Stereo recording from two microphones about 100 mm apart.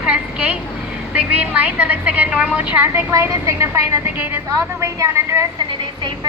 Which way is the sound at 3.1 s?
30° right (ahead or behind).